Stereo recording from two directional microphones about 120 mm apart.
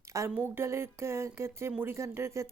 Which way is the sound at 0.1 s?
25° right (ahead or behind).